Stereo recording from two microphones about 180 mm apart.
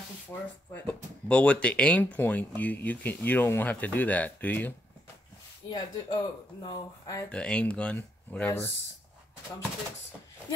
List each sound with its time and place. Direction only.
0.3 s speech: 15° left (ahead or behind)
5.7 s speech: 25° left (ahead or behind)
7.2 s speech: 5° left (ahead or behind)